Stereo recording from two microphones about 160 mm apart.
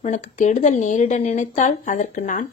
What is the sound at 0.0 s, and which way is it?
A woman's voice, 50° left (ahead or behind).